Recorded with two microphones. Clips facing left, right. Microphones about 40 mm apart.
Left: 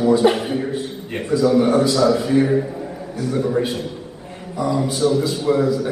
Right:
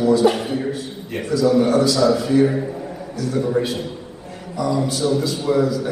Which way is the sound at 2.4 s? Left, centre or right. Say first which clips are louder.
Even; centre.